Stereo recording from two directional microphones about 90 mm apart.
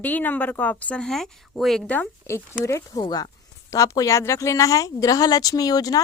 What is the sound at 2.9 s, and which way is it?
Speech, 45° left (ahead or behind).